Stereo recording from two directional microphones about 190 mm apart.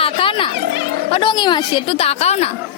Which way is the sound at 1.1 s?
25° left (ahead or behind).